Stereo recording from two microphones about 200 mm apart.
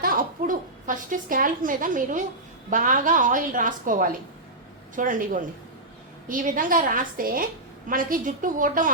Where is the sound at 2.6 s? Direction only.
40° right (ahead or behind).